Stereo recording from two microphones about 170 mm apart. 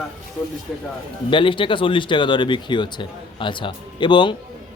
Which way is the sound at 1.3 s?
30° left (ahead or behind).